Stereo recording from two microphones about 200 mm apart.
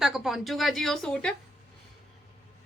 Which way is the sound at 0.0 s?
Centre (ahead or behind).